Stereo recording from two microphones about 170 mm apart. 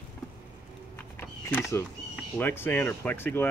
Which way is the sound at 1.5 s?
15° left (ahead or behind).